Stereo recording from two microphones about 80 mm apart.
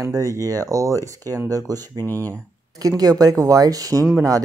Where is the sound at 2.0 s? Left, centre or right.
Left.